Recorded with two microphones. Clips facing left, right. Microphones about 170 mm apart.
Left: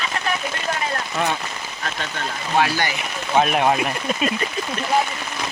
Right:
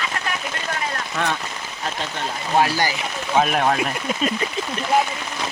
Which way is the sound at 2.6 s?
35° right (ahead or behind).